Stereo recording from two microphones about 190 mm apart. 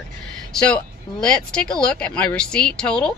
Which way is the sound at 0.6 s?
5° left (ahead or behind).